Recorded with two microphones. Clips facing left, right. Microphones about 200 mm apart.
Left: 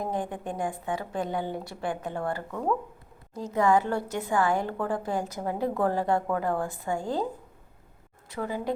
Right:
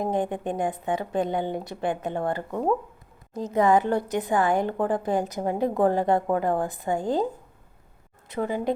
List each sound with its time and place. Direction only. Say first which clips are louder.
0.0 s a woman's voice: right 5 dB; 20° right (ahead or behind)
8.3 s a woman's voice: right 5 dB; 20° right (ahead or behind)